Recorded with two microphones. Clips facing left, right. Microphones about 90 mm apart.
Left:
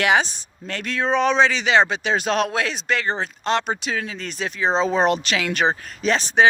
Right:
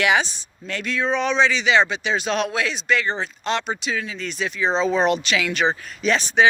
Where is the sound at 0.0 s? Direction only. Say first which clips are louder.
Left 1 dB; 40° left (ahead or behind).